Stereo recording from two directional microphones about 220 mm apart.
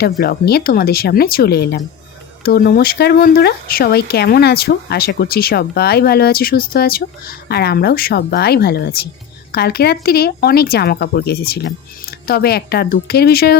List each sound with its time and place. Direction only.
0.0 s speech: 45° left (ahead or behind)